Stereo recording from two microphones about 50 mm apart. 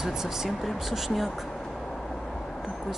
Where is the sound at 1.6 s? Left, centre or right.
Centre.